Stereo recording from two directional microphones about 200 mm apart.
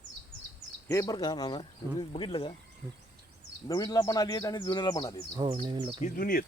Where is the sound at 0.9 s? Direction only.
15° left (ahead or behind).